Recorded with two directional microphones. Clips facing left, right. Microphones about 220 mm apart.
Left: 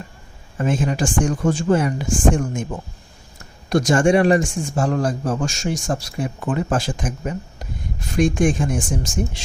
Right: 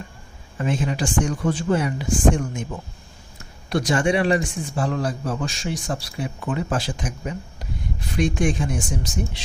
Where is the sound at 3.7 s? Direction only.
45° left (ahead or behind).